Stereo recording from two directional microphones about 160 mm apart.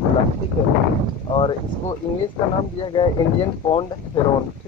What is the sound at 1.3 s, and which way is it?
Speech, 35° left (ahead or behind).